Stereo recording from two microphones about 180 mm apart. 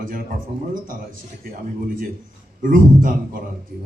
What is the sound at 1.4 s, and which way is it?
Speech, 55° right (ahead or behind).